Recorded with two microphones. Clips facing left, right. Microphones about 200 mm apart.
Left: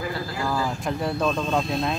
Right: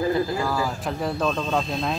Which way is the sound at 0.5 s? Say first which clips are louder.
Even; centre (ahead or behind).